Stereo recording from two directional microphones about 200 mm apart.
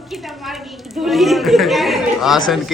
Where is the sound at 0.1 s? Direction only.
Centre (ahead or behind).